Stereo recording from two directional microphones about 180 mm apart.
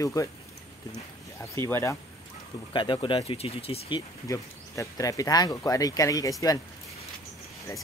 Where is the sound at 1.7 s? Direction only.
15° left (ahead or behind).